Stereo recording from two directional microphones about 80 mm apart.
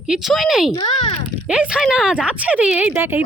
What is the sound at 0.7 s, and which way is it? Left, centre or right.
Speech, left.